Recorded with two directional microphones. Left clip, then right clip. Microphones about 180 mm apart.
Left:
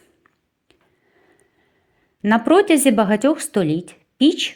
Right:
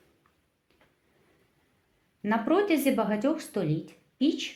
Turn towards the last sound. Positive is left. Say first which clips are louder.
# left 11 dB
turn(degrees=45)  # may be behind; listen again after turning